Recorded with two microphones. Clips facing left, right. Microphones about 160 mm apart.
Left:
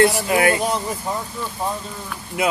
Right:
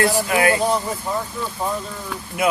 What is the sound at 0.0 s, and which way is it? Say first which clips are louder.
Speech: left 2 dB; 25° left (ahead or behind).